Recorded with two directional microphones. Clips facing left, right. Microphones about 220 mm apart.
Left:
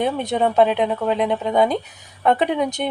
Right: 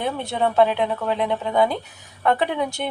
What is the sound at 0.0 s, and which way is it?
Speech, 20° left (ahead or behind).